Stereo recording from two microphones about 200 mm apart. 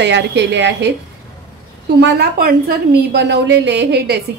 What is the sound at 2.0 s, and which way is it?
A woman's voice, 50° right (ahead or behind).